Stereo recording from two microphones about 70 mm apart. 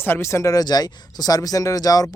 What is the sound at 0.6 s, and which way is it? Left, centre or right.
Speech, left.